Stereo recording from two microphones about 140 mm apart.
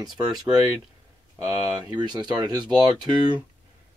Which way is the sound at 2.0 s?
30° right (ahead or behind).